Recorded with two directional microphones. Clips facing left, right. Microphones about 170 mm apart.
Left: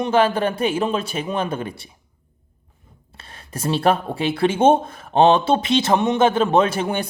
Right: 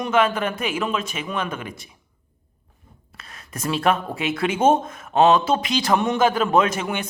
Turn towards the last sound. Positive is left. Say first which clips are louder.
# left 2 dB
turn(degrees=30)  # may be behind; listen again after turning